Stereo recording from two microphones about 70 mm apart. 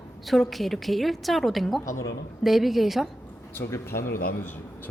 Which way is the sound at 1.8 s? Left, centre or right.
Left.